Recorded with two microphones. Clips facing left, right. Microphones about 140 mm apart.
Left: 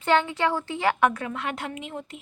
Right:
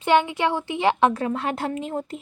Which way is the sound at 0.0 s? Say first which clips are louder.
Right 3 dB; 15° right (ahead or behind).